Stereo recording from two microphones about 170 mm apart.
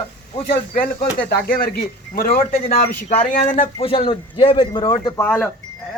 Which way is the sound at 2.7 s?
50° left (ahead or behind).